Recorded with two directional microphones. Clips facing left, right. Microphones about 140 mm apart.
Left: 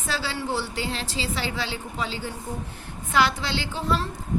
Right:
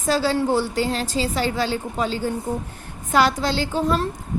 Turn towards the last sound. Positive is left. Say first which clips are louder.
# right 6 dB
turn(degrees=-45)  # may be behind; listen again after turning